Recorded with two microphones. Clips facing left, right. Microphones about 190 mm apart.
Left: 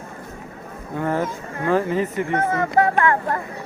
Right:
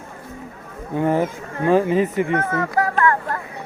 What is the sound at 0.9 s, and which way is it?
Speech, 15° right (ahead or behind).